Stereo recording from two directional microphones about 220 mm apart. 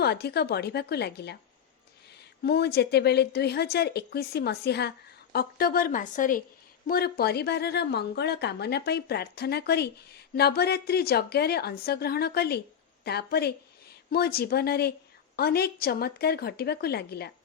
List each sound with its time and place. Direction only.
0.0 s a woman's voice: 45° left (ahead or behind)
2.4 s a woman's voice: 45° left (ahead or behind)